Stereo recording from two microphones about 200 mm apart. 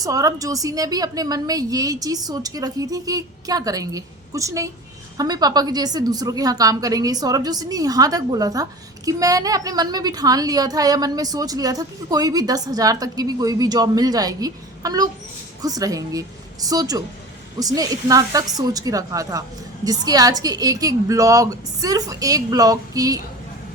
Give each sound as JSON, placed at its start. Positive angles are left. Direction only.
{"t": 0.0, "sound": "a woman's voice", "side_deg": -15}